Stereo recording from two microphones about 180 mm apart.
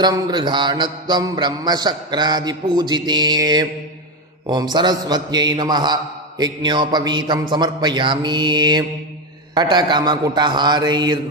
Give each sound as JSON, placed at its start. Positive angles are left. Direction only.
{"t": 0.0, "sound": "a man's voice", "side_deg": -25}